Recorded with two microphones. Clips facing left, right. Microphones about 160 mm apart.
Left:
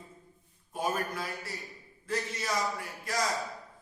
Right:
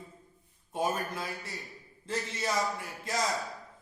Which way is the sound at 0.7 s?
25° right (ahead or behind).